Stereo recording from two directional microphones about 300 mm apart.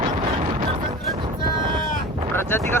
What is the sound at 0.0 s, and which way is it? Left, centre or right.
Music, right.